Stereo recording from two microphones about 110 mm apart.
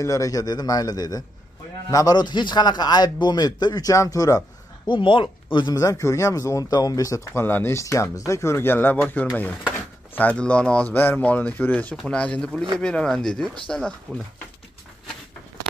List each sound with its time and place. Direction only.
0.0 s a man's voice: 30° left (ahead or behind)
4.8 s speech: 50° left (ahead or behind)
5.8 s speech: 30° left (ahead or behind); by 14.2 s 5° left (ahead or behind)